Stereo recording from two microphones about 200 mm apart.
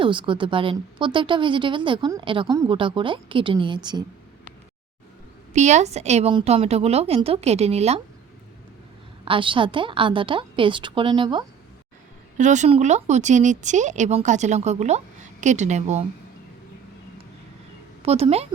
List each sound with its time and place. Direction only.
0.0 s a woman's voice: 25° right (ahead or behind)
5.5 s speech: 35° right (ahead or behind)
9.2 s a woman's voice: 25° right (ahead or behind)
12.4 s speech: 35° right (ahead or behind)
18.0 s speech: 30° right (ahead or behind)